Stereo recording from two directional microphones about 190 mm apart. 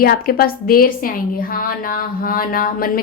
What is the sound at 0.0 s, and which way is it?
A woman's voice, 50° left (ahead or behind).